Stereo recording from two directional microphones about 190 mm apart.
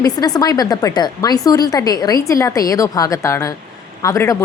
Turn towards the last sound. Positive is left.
turn(degrees=15)  # may be behind; listen again after turning